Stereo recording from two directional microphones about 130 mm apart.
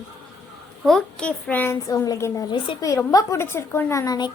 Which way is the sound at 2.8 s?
25° left (ahead or behind).